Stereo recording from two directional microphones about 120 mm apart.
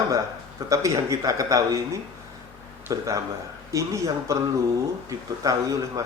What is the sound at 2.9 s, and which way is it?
Speech, 30° right (ahead or behind).